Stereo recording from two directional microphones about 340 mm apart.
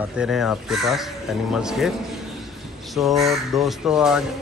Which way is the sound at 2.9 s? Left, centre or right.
Centre.